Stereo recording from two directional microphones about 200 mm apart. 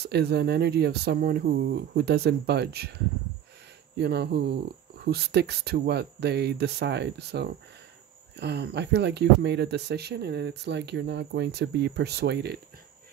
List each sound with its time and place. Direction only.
0.0 s speech: 55° right (ahead or behind)
4.0 s speech: 55° right (ahead or behind)